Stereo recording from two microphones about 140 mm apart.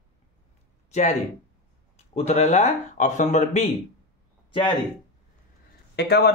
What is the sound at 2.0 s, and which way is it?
Speech, 50° left (ahead or behind).